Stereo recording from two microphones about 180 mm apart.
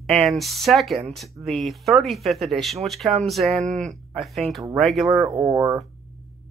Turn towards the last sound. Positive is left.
turn(degrees=-15)  # may be behind; listen again after turning